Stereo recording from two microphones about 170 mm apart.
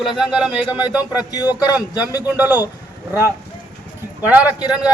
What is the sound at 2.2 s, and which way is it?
A man's voice, 10° right (ahead or behind).